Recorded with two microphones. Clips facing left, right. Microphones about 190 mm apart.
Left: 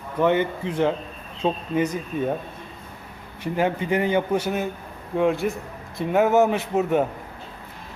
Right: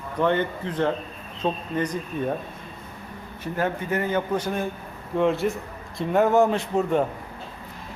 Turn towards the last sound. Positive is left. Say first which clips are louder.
# left 1 dB
turn(degrees=5)  # may be behind; listen again after turning